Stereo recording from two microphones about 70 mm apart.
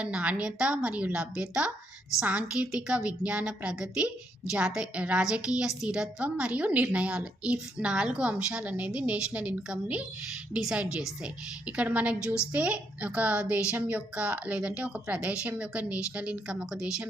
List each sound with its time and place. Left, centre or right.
0.0 s a woman's voice: centre
10.5 s a woman's voice: centre